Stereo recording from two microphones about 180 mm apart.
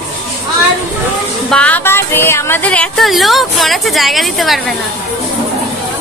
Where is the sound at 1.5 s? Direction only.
5° left (ahead or behind).